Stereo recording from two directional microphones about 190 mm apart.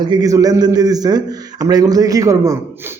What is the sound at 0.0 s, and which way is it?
A man's voice, 20° right (ahead or behind).